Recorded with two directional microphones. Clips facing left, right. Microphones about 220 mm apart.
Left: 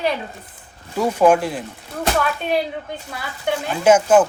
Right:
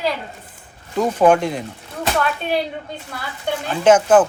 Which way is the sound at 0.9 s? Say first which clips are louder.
Even; 10° left (ahead or behind).